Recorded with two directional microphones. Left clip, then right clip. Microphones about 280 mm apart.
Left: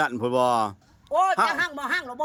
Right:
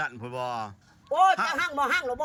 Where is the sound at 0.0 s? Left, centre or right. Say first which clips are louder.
Left 10 dB; left.